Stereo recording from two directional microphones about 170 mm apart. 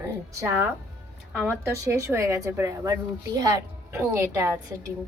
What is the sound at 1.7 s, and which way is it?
A woman's voice, 15° right (ahead or behind).